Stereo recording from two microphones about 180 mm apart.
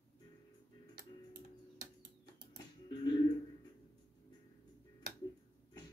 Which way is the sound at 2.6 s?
25° left (ahead or behind).